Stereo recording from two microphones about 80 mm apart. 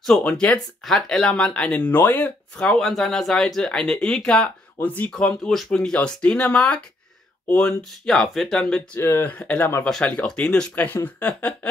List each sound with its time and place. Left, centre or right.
0.0 s speech: centre
2.5 s speech: centre
4.8 s speech: centre
5.1 s speech: centre
8.0 s speech: centre
9.0 s speech: left
9.6 s speech: left
9.8 s speech: centre